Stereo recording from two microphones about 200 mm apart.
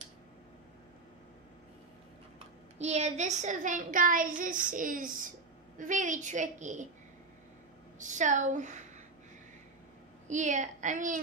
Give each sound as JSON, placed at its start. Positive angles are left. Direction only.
{"t": 2.3, "sound": "a woman's voice", "side_deg": -35}
{"t": 8.0, "sound": "a woman's voice", "side_deg": -40}
{"t": 10.2, "sound": "a woman's voice", "side_deg": -35}